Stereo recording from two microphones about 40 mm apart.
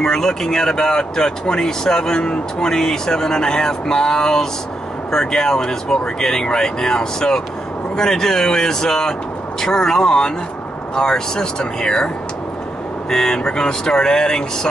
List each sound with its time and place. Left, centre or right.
0.0 s speech: centre
13.1 s speech: centre